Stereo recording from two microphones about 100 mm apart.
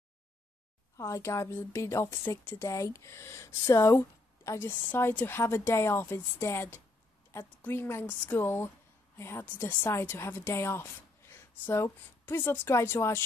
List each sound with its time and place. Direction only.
0.9 s a woman's voice: 30° left (ahead or behind)